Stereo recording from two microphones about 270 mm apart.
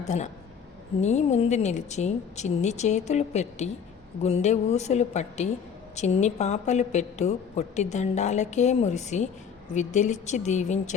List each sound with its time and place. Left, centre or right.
0.1 s a woman's voice: left